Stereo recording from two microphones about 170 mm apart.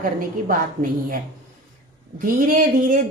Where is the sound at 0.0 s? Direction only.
55° right (ahead or behind).